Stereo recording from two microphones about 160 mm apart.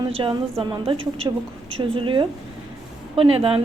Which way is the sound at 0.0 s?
30° right (ahead or behind).